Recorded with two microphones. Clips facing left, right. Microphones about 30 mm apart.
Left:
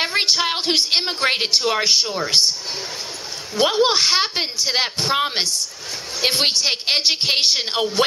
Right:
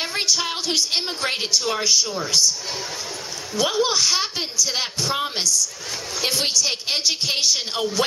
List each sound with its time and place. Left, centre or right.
0.0 s a woman's voice: left
2.0 s speech: left
2.3 s a woman's voice: left
3.6 s a woman's voice: left